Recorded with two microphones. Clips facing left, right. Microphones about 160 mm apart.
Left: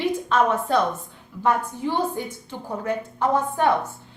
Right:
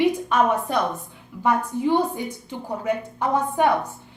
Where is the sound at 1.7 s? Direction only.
15° right (ahead or behind).